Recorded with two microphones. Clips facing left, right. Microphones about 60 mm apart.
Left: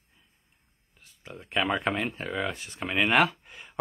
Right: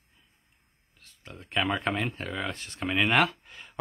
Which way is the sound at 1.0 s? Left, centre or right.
Centre.